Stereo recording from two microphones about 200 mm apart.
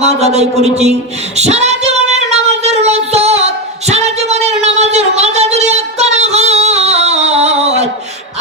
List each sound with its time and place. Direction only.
0.0 s a man's voice: 35° right (ahead or behind)
1.4 s child singing: 35° right (ahead or behind)